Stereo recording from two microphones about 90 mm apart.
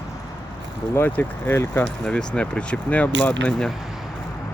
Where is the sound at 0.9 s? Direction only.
25° left (ahead or behind).